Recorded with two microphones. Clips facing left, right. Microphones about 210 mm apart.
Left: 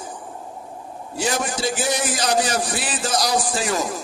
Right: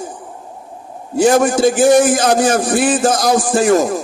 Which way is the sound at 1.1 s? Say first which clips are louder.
Right 13 dB; 50° right (ahead or behind).